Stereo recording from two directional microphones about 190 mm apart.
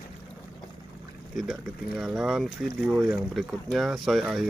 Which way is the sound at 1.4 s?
Centre (ahead or behind).